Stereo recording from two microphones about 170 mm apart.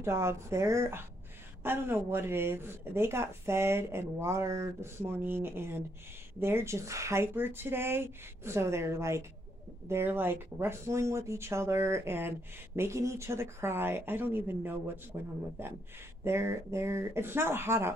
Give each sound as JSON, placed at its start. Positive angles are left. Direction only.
{"t": 0.0, "sound": "speech", "side_deg": -15}